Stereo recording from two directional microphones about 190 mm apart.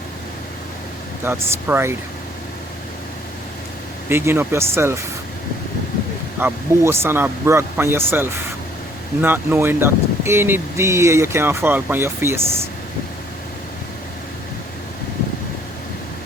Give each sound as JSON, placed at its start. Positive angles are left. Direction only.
{"t": 1.2, "sound": "speech", "side_deg": -10}
{"t": 4.1, "sound": "speech", "side_deg": -15}
{"t": 6.4, "sound": "speech", "side_deg": -15}